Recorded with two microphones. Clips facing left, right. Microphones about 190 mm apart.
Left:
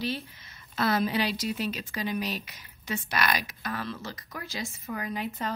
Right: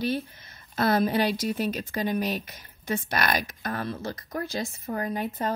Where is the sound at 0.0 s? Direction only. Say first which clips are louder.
Right 5 dB; 50° right (ahead or behind).